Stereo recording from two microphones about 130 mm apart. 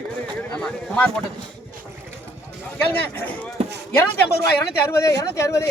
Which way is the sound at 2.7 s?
15° left (ahead or behind).